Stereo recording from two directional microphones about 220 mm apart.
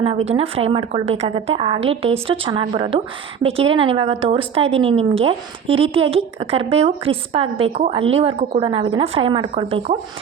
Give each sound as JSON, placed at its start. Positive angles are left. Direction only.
{"t": 0.0, "sound": "a woman's voice", "side_deg": -25}